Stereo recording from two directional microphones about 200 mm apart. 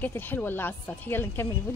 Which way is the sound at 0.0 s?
10° left (ahead or behind).